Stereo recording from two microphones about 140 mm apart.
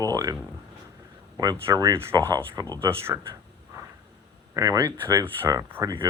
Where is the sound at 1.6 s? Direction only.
25° right (ahead or behind).